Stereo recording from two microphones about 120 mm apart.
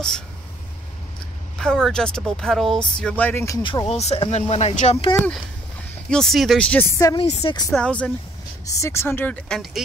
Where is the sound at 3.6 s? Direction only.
40° left (ahead or behind).